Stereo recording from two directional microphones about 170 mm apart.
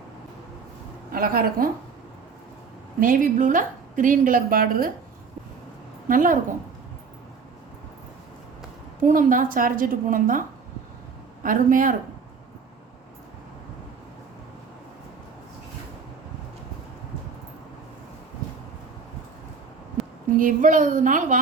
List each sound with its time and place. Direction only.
1.1 s a woman's voice: 60° right (ahead or behind)
3.0 s a woman's voice: 50° right (ahead or behind)
6.1 s a woman's voice: 50° right (ahead or behind)
9.0 s a woman's voice: 50° right (ahead or behind)
11.4 s a woman's voice: 50° right (ahead or behind)
20.0 s a sound: centre (ahead or behind)
20.3 s a woman's voice: 50° right (ahead or behind)